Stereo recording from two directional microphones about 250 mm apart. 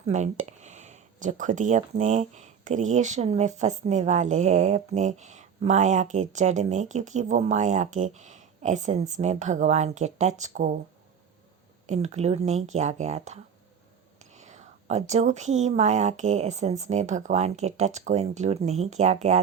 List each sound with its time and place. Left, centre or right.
0.0 s speech: right
11.9 s speech: right